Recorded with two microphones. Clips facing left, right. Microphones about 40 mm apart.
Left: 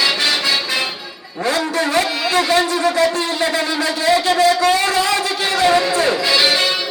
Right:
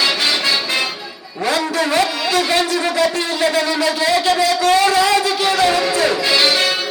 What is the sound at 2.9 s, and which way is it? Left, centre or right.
Speech, left.